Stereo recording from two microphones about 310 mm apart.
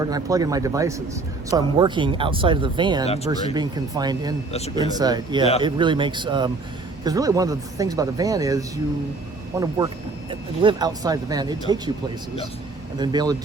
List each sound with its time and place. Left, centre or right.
0.0 s speech: centre
13.0 s speech: centre